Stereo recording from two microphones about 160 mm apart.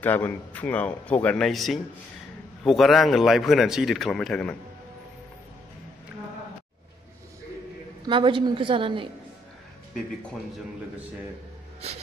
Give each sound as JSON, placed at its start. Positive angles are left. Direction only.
{"t": 0.0, "sound": "a man's voice", "side_deg": 10}
{"t": 8.1, "sound": "a woman's voice", "side_deg": -30}